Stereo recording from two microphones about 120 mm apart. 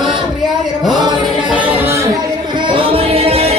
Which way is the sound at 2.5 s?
45° right (ahead or behind).